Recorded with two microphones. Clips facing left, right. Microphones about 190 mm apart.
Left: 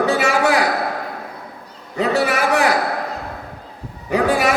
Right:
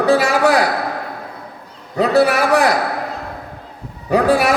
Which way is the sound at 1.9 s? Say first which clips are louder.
Right 5 dB; 35° right (ahead or behind).